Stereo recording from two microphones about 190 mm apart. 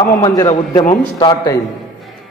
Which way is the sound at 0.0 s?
20° left (ahead or behind).